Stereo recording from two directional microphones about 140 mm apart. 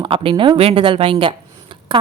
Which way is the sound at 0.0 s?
40° right (ahead or behind).